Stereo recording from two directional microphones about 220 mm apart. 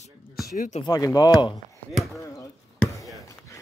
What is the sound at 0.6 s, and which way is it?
Speech, 35° left (ahead or behind).